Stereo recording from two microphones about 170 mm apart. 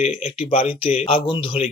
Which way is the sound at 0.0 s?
35° left (ahead or behind).